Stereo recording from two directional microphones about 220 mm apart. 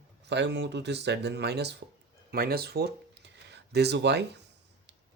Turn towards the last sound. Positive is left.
turn(degrees=-50)  # may be behind; listen again after turning